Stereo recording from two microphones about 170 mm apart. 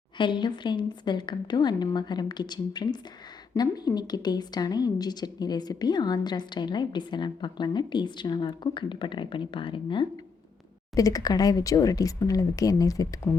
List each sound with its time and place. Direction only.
0.2 s a woman's voice: 25° left (ahead or behind)
10.9 s a woman's voice: 20° left (ahead or behind)